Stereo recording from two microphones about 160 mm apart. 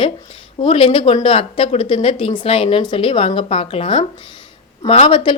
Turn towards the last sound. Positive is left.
turn(degrees=30)  # may be behind; listen again after turning